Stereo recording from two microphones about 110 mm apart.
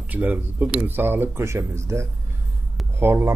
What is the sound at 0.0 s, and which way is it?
A man's voice, 15° right (ahead or behind).